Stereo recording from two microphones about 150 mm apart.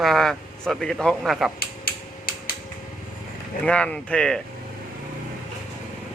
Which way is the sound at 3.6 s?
10° left (ahead or behind).